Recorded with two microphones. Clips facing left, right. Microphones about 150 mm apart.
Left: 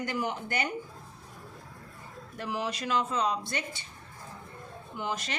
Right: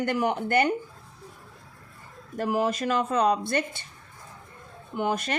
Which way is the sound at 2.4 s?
45° right (ahead or behind).